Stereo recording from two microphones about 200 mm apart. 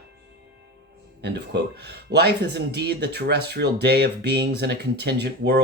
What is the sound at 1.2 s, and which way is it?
Speech, 55° right (ahead or behind).